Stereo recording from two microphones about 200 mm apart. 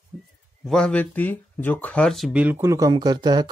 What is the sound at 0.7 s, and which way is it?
Speech, 5° left (ahead or behind).